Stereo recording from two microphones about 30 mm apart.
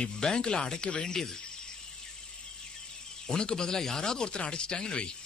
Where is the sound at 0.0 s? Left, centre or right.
Left.